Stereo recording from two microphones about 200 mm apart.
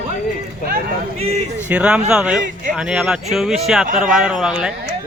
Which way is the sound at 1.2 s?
30° right (ahead or behind).